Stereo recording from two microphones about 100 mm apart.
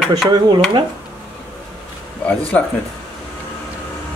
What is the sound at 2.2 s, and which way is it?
Speech, 15° left (ahead or behind).